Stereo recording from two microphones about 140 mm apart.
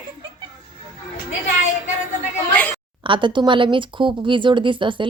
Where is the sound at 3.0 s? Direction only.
35° right (ahead or behind).